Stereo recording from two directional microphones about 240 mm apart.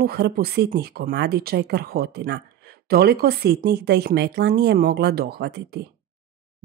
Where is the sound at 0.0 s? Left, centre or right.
Right.